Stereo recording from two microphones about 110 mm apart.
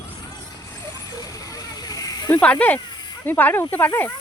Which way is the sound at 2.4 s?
15° left (ahead or behind).